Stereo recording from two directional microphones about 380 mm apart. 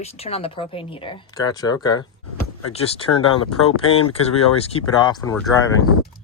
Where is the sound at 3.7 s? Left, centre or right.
Left.